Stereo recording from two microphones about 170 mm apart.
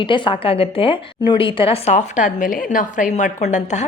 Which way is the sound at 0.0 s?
30° left (ahead or behind).